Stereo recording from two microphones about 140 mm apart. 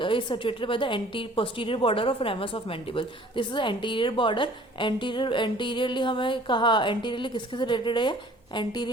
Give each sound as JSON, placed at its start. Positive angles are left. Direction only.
{"t": 0.0, "sound": "a woman's voice", "side_deg": 35}